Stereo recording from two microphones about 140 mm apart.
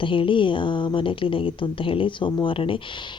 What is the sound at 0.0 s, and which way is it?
Speech, 35° left (ahead or behind).